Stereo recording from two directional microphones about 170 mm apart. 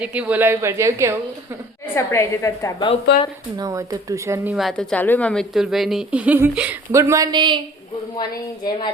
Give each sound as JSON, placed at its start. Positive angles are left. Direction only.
{"t": 0.0, "sound": "speech", "side_deg": -5}
{"t": 2.0, "sound": "a woman's voice", "side_deg": 15}
{"t": 3.1, "sound": "speech", "side_deg": 85}
{"t": 3.6, "sound": "speech", "side_deg": -20}
{"t": 4.5, "sound": "speech", "side_deg": 0}